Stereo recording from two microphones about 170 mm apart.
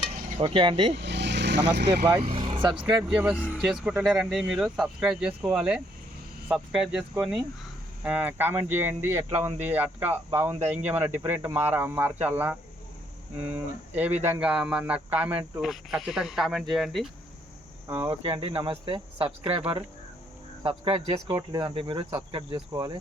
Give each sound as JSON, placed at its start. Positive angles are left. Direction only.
{"t": 0.3, "sound": "speech", "side_deg": -30}
{"t": 0.9, "sound": "vehicle", "side_deg": -90}
{"t": 2.3, "sound": "vehicle", "side_deg": -30}
{"t": 3.0, "sound": "speech", "side_deg": -5}
{"t": 14.2, "sound": "speech", "side_deg": -15}
{"t": 17.8, "sound": "speech", "side_deg": -15}
{"t": 18.1, "sound": "speech", "side_deg": -30}